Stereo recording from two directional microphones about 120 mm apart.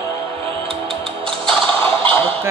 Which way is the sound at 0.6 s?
50° right (ahead or behind).